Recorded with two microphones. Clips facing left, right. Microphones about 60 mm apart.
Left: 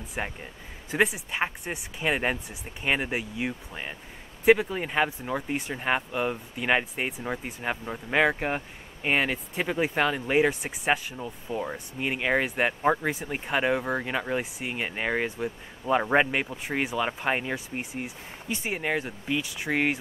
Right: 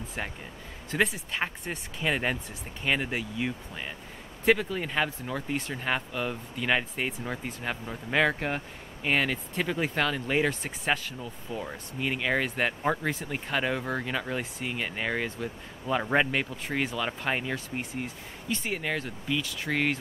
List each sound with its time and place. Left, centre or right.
0.2 s speech: centre